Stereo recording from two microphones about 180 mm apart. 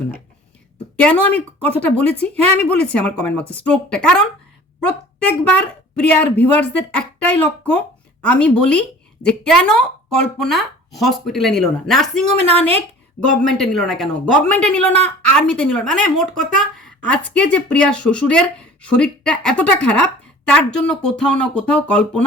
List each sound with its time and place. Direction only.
1.0 s speech: 10° left (ahead or behind)
12.4 s a woman's voice: 35° right (ahead or behind)
13.4 s speech: centre (ahead or behind)